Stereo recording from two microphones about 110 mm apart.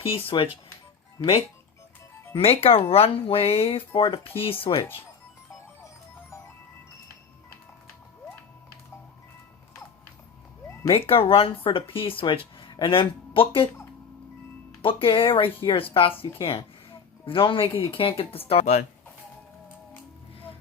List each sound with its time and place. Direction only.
0.1 s speech: 55° left (ahead or behind)
1.2 s speech: 35° left (ahead or behind)
2.3 s speech: 60° left (ahead or behind)
10.8 s speech: 55° left (ahead or behind)
14.8 s speech: 55° left (ahead or behind); by 18.8 s 75° left (ahead or behind)